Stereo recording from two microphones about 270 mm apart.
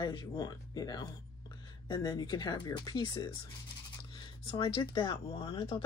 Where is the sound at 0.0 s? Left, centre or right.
Centre.